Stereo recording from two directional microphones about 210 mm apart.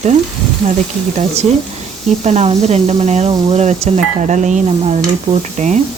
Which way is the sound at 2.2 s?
30° right (ahead or behind).